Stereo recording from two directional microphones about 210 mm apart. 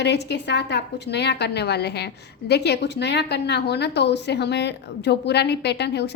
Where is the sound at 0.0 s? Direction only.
55° left (ahead or behind).